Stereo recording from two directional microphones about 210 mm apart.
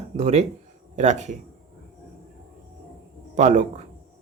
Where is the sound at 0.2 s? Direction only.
30° right (ahead or behind).